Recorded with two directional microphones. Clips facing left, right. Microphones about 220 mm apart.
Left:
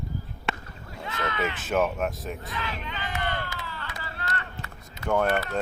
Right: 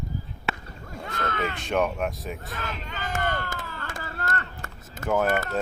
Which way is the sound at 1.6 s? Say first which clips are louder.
Even; 5° left (ahead or behind).